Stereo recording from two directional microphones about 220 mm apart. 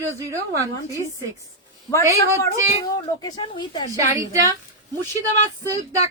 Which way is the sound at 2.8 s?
15° left (ahead or behind).